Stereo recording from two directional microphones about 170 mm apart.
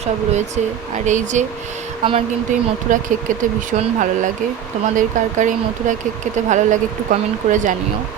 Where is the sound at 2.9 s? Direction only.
50° right (ahead or behind).